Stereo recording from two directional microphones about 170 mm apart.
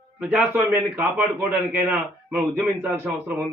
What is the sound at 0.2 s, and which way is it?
A man's voice, 10° right (ahead or behind).